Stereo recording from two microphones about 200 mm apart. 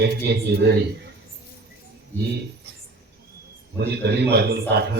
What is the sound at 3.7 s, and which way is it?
A man's voice, 55° right (ahead or behind).